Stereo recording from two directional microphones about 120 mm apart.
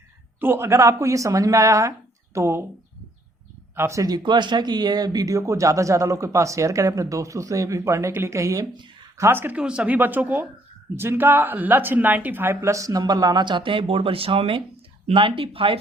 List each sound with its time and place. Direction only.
0.3 s speech: 20° right (ahead or behind)
3.8 s speech: 25° right (ahead or behind); by 15.8 s 50° right (ahead or behind)